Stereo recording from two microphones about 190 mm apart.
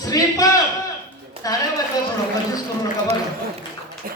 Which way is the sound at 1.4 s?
20° left (ahead or behind).